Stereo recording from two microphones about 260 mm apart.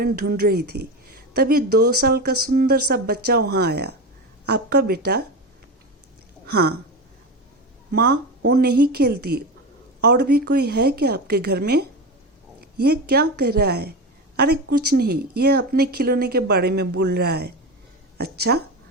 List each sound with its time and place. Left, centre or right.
0.0 s speech: right
6.5 s speech: right
8.4 s speech: right